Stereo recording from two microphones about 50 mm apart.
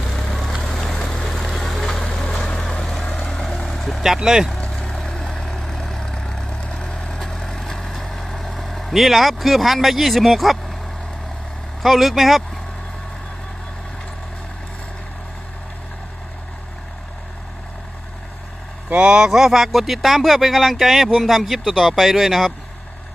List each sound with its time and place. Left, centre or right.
0.0 s vehicle: centre
0.6 s boat: centre
1.1 s vehicle: centre
2.0 s vehicle: left; by 4.0 s centre
4.0 s speech: centre
4.7 s vehicle: left; by 10.6 s centre
11.8 s speech: centre
18.9 s speech: centre